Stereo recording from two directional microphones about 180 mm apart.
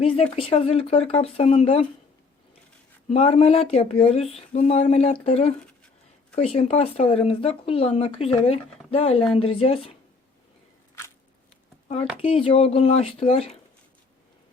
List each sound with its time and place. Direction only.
0.0 s speech: 30° left (ahead or behind)
3.1 s speech: 30° left (ahead or behind)
12.1 s speech: 30° left (ahead or behind)